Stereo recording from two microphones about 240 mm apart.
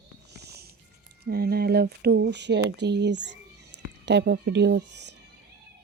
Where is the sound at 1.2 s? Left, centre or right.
Right.